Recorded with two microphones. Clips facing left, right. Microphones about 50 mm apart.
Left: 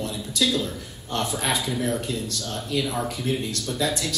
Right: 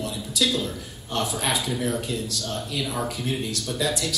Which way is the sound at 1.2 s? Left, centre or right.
Left.